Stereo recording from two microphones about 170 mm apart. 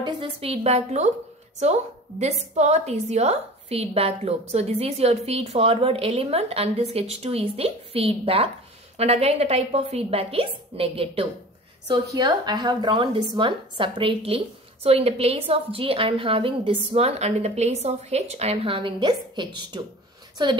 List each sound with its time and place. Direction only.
0.0 s a woman's voice: 30° right (ahead or behind)